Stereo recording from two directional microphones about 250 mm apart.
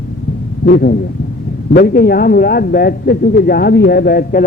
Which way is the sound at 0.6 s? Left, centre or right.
Left.